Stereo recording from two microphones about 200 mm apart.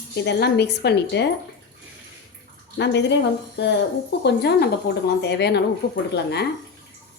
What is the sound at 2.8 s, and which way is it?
Speech, 60° left (ahead or behind).